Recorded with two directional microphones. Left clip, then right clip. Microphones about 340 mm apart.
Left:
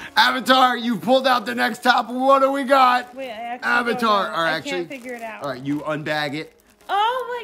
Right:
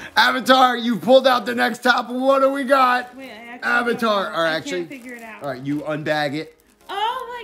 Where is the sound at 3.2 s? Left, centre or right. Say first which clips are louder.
Left 7 dB; centre.